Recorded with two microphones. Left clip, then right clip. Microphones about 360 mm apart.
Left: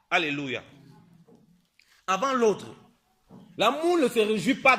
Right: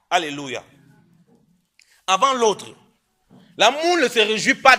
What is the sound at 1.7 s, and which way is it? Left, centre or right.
A man's voice, right.